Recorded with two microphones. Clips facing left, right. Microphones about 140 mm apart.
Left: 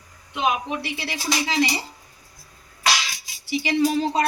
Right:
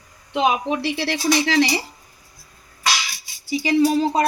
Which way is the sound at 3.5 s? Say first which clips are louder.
Right 4 dB; 40° right (ahead or behind).